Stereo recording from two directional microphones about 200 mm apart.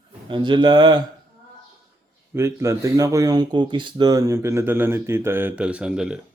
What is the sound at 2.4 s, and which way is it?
Speech, 15° right (ahead or behind).